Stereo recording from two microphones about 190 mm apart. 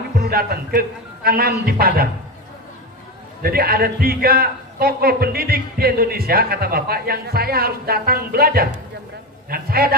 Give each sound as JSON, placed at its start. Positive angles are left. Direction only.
{"t": 0.2, "sound": "a man's voice", "side_deg": -55}
{"t": 3.4, "sound": "a man's voice", "side_deg": -50}